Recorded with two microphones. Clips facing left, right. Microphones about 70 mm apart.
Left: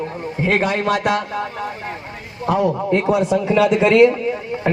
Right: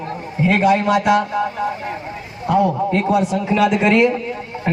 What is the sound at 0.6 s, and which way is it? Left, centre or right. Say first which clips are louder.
Speech: right 4 dB; left.